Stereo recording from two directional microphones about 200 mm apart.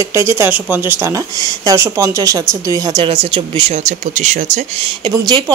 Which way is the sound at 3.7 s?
35° right (ahead or behind).